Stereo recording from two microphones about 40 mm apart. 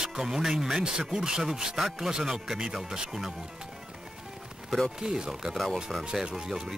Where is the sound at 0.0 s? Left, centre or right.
Centre.